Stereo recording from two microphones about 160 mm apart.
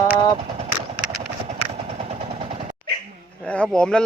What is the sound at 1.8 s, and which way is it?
Machine gun, 40° right (ahead or behind).